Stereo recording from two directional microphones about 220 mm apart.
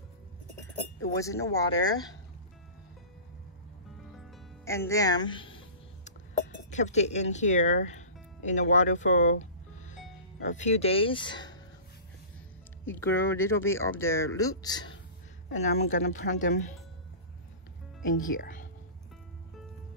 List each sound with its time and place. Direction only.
1.1 s speech: 15° left (ahead or behind)
4.6 s speech: 15° left (ahead or behind)
6.7 s speech: 30° left (ahead or behind)
12.8 s speech: 10° left (ahead or behind)
15.5 s speech: 30° left (ahead or behind)
18.0 s speech: 40° left (ahead or behind)